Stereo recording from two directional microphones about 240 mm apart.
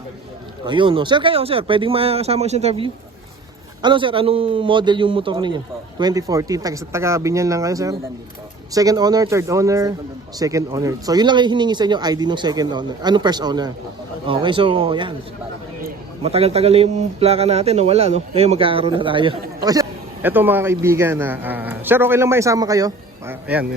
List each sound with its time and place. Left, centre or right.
0.6 s a man's voice: centre
16.2 s a man's voice: right; by 23.6 s centre